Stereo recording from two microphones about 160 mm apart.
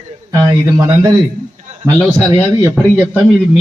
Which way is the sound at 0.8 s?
25° right (ahead or behind).